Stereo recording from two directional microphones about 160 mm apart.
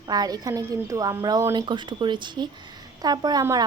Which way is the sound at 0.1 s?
25° right (ahead or behind).